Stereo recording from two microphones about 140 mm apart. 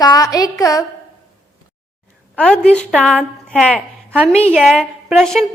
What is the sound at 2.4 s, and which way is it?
Speech, 5° left (ahead or behind).